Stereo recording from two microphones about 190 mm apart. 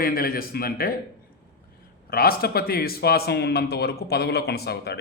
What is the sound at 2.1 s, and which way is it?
A man's voice, 50° left (ahead or behind).